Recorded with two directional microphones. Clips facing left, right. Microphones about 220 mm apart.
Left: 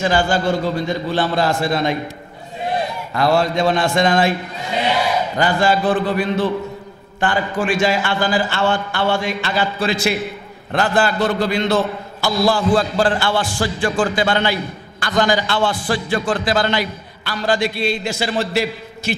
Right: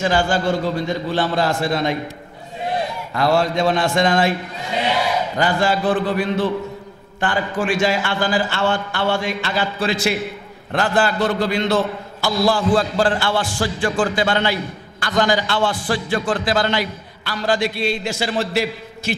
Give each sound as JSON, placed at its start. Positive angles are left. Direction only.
{"t": 0.0, "sound": "a man's voice", "side_deg": 15}
{"t": 3.2, "sound": "a man's voice", "side_deg": 15}